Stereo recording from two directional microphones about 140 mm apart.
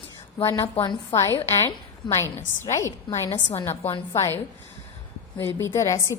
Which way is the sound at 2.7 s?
20° left (ahead or behind).